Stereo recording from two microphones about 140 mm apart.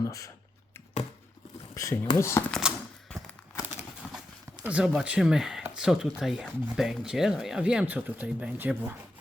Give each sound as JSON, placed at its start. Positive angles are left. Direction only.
{"t": 0.0, "sound": "speech", "side_deg": 25}
{"t": 1.7, "sound": "speech", "side_deg": 20}
{"t": 2.5, "sound": "speech", "side_deg": -5}
{"t": 3.1, "sound": "a sound", "side_deg": 10}
{"t": 4.0, "sound": "clip-clop", "side_deg": -5}
{"t": 4.6, "sound": "speech", "side_deg": -5}